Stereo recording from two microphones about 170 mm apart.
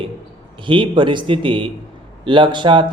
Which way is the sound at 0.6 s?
30° right (ahead or behind).